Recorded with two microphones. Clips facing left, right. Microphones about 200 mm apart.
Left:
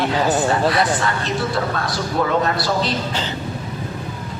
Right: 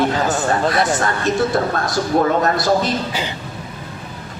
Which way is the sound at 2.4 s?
45° right (ahead or behind).